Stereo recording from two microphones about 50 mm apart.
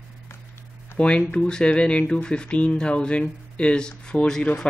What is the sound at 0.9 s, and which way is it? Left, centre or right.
Speech, centre.